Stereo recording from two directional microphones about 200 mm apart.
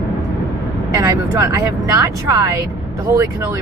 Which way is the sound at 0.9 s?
15° right (ahead or behind).